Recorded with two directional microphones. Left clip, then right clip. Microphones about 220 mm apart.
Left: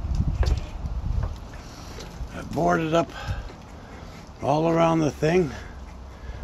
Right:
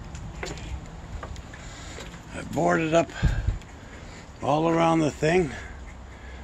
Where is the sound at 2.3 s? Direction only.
5° right (ahead or behind).